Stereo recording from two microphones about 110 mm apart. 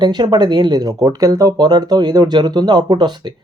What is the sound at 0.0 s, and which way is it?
Speech, 40° right (ahead or behind).